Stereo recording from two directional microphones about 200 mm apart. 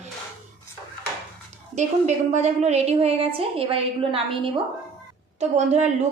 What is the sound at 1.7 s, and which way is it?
A woman's voice, 35° right (ahead or behind).